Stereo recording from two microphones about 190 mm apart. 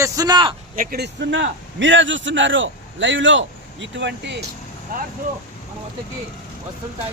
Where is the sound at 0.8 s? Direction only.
60° right (ahead or behind).